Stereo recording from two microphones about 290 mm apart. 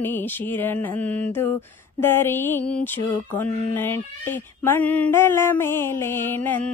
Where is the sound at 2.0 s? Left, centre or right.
Centre.